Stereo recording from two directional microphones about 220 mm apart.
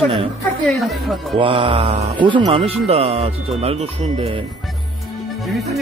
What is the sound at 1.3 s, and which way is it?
Speech, 25° right (ahead or behind).